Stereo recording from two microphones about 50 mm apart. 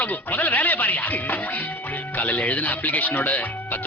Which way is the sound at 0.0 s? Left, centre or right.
Left.